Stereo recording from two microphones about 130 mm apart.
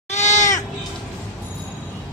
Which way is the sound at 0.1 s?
65° left (ahead or behind).